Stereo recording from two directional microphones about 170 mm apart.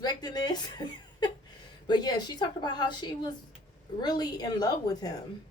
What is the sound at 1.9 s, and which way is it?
A woman's voice, 25° left (ahead or behind).